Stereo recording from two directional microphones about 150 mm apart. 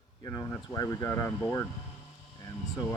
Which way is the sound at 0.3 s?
20° left (ahead or behind).